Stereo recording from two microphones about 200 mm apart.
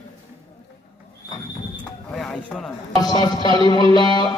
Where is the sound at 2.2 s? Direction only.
5° left (ahead or behind).